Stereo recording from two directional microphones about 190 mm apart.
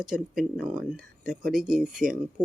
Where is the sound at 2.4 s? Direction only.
20° right (ahead or behind).